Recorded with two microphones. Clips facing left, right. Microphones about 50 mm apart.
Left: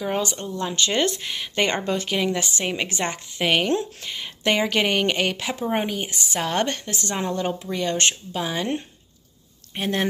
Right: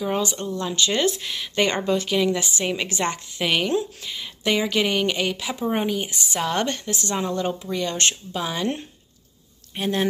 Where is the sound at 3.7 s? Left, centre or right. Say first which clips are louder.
Even; left.